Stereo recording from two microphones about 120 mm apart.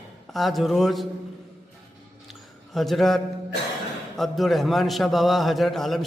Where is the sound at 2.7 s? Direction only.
Centre (ahead or behind).